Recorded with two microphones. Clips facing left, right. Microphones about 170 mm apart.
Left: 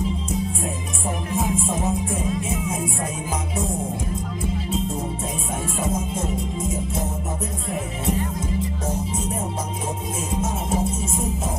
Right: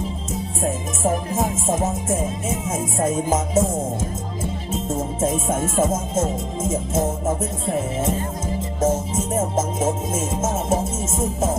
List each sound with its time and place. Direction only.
1.0 s music: 40° right (ahead or behind)
4.9 s music: 45° right (ahead or behind)
9.3 s music: 45° right (ahead or behind)